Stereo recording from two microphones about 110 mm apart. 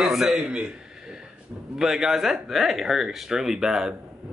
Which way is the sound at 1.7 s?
5° right (ahead or behind).